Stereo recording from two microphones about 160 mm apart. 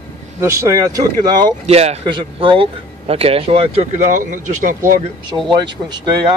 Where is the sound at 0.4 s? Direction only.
15° right (ahead or behind).